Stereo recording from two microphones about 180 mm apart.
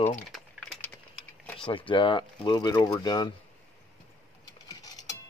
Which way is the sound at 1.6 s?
30° left (ahead or behind).